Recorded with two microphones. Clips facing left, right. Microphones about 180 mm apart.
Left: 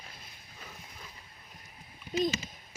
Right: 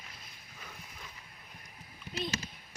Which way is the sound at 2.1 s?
40° left (ahead or behind).